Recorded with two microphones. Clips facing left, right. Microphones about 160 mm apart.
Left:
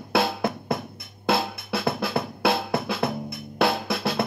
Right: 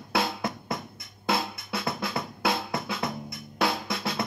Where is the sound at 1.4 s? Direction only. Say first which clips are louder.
Left 5 dB; 60° left (ahead or behind).